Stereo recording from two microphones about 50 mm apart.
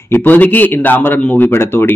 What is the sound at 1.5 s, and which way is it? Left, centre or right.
Speech, left.